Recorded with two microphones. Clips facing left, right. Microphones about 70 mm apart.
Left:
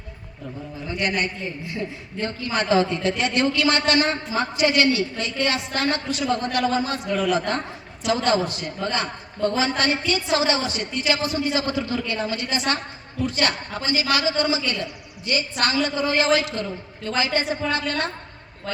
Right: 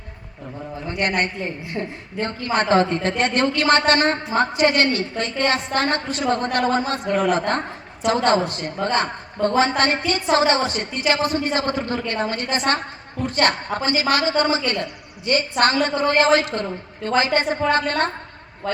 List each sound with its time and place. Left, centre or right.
0.9 s a man's voice: right